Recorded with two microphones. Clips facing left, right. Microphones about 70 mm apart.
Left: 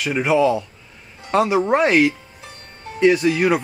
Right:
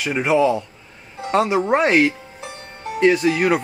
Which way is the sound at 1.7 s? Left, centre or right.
Centre.